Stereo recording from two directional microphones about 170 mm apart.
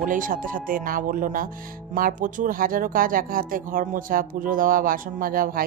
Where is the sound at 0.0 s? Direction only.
50° right (ahead or behind).